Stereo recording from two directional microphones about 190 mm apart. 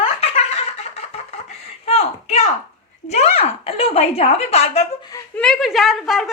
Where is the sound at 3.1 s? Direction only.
35° left (ahead or behind).